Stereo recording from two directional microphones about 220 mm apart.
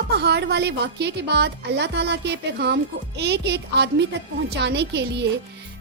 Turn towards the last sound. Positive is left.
turn(degrees=-50)  # may be behind; listen again after turning